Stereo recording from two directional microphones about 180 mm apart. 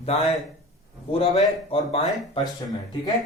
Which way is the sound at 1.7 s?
30° left (ahead or behind).